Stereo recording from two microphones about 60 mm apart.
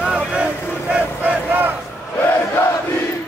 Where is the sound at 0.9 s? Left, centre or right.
Right.